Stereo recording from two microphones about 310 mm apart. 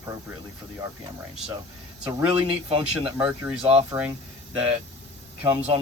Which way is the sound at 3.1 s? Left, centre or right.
Centre.